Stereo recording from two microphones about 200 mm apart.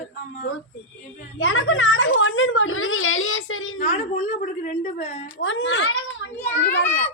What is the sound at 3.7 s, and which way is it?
A woman's voice, 35° left (ahead or behind).